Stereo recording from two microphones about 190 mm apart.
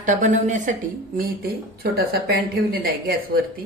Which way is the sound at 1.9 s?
55° right (ahead or behind).